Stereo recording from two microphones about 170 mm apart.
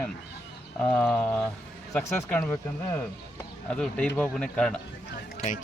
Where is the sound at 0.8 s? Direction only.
10° left (ahead or behind).